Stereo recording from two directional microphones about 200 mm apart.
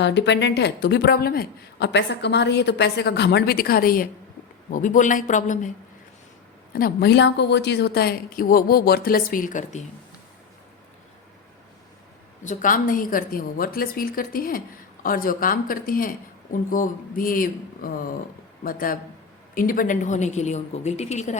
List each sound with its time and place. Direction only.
0.0 s a woman's voice: 60° left (ahead or behind); by 5.7 s 40° left (ahead or behind)
6.7 s speech: 50° left (ahead or behind)
12.5 s a woman's voice: 40° left (ahead or behind)